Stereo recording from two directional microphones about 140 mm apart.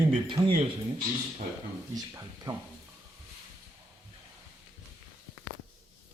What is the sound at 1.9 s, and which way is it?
Speech, 25° right (ahead or behind).